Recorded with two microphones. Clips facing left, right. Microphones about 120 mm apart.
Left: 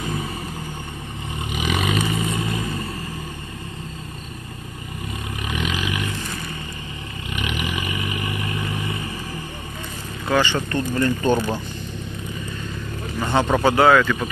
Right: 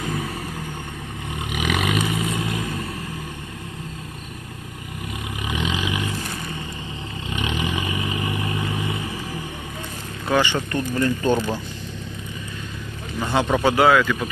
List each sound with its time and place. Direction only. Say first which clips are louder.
1.7 s vehicle: even; centre (ahead or behind)
5.5 s vehicle: right 1 dB; 20° right (ahead or behind)
7.3 s vehicle: right 1 dB; 25° right (ahead or behind)
10.2 s speech: even; 20° right (ahead or behind)
11.3 s speech: left 1 dB; 15° left (ahead or behind)
13.2 s speech: left 1 dB; centre (ahead or behind)